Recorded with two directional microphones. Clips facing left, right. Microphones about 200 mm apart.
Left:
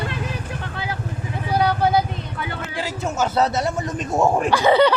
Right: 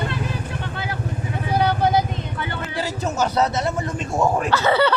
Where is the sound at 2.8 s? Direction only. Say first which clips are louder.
Right 1 dB; 15° left (ahead or behind).